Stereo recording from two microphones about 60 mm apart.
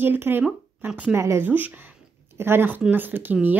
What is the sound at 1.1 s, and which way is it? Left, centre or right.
Speech, right.